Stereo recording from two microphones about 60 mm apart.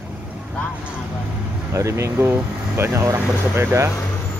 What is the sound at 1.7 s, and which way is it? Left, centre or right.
Speech, right.